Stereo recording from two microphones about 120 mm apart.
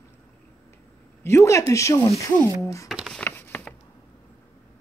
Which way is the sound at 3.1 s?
15° left (ahead or behind).